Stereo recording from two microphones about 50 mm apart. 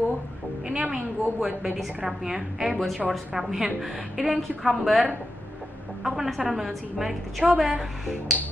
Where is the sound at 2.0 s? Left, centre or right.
Centre.